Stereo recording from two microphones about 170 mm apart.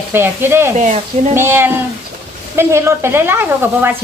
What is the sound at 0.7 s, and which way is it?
Speech, 45° right (ahead or behind).